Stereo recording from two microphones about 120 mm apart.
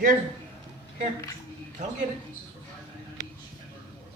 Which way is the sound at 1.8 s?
75° right (ahead or behind).